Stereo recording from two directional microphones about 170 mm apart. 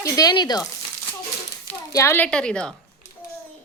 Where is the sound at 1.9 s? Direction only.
15° left (ahead or behind).